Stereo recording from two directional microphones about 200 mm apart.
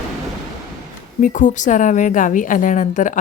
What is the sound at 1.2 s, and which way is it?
A woman's voice, 40° left (ahead or behind).